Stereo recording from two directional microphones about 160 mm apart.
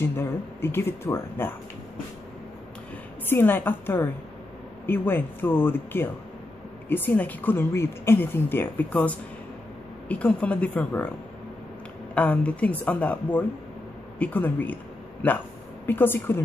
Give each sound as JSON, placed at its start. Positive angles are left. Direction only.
{"t": 0.0, "sound": "a woman's voice", "side_deg": 15}
{"t": 3.3, "sound": "a woman's voice", "side_deg": 15}
{"t": 12.1, "sound": "a woman's voice", "side_deg": 10}
{"t": 15.9, "sound": "a woman's voice", "side_deg": 15}